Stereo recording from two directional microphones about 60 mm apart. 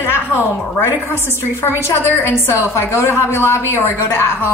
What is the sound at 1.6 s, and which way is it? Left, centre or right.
A woman's voice, left.